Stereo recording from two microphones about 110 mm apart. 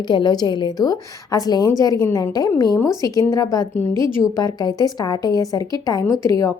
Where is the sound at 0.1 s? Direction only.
40° left (ahead or behind).